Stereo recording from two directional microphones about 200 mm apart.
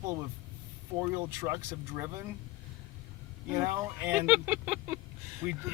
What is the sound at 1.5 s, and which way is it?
Speech, 15° right (ahead or behind).